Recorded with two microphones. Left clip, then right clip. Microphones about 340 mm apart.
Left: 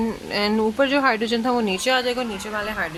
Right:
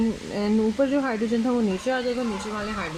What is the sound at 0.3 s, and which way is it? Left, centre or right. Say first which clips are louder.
Speech: left 4 dB; left.